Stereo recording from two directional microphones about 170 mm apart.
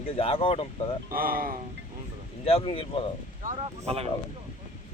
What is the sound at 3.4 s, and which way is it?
Speech, 50° right (ahead or behind).